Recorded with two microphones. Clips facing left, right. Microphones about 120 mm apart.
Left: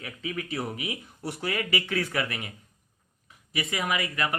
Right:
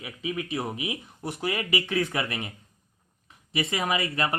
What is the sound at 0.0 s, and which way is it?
Speech, 15° right (ahead or behind).